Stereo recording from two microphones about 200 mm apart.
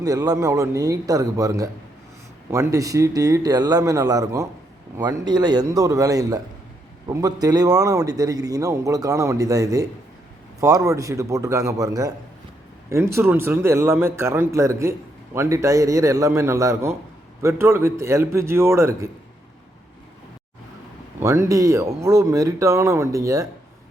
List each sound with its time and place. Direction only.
0.0 s a man's voice: 15° right (ahead or behind)
21.2 s a man's voice: 15° right (ahead or behind)